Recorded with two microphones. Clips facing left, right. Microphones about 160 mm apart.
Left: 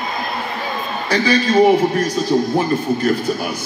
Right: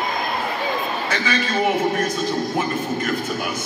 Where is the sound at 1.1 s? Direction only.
35° left (ahead or behind).